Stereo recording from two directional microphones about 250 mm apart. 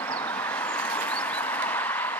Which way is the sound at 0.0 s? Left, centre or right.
Centre.